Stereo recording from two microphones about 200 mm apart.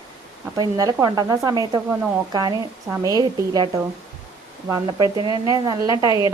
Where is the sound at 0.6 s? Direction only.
20° right (ahead or behind).